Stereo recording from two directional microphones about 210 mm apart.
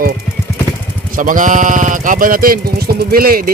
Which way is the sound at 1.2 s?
40° right (ahead or behind).